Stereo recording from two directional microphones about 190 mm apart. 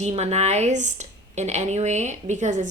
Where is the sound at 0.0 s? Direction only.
35° right (ahead or behind).